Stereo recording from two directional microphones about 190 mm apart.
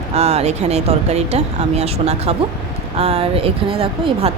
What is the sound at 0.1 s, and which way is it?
Speech, 35° right (ahead or behind).